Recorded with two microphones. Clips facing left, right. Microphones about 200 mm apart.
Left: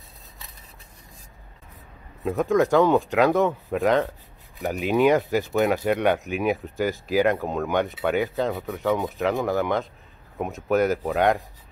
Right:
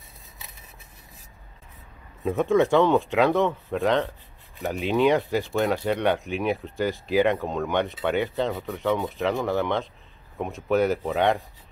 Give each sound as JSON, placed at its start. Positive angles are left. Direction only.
{"t": 2.2, "sound": "speech", "side_deg": 0}